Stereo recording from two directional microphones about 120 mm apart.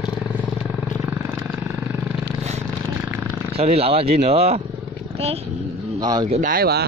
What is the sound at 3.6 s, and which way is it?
Speech, 60° right (ahead or behind).